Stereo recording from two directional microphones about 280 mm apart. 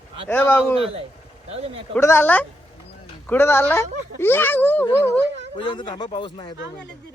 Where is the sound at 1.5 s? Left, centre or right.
Right.